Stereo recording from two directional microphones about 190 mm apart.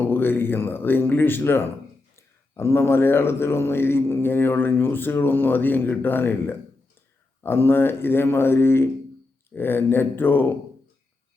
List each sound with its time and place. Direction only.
0.1 s speech: 10° left (ahead or behind)